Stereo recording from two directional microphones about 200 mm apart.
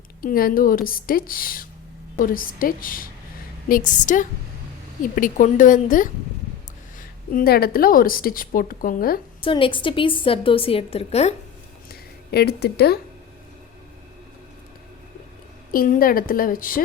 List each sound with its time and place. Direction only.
0.2 s a woman's voice: 45° left (ahead or behind)
7.3 s a woman's voice: 50° left (ahead or behind)
9.4 s a woman's voice: 25° left (ahead or behind)
11.9 s a sound: 55° left (ahead or behind)
15.7 s a woman's voice: 45° left (ahead or behind)